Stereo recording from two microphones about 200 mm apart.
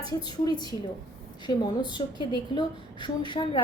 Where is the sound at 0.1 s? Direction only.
20° left (ahead or behind).